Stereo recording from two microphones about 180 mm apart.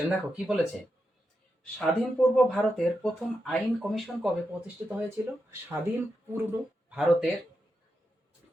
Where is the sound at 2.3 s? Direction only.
5° left (ahead or behind).